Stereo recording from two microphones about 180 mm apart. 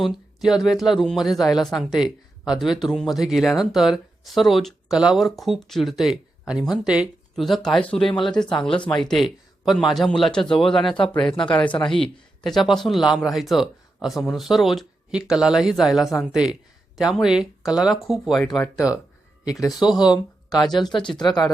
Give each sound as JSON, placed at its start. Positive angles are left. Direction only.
{"t": 0.0, "sound": "speech", "side_deg": 0}
{"t": 11.2, "sound": "speech", "side_deg": 25}
{"t": 11.4, "sound": "a man's voice", "side_deg": 10}
{"t": 19.6, "sound": "speech", "side_deg": 0}
{"t": 20.7, "sound": "speech", "side_deg": 25}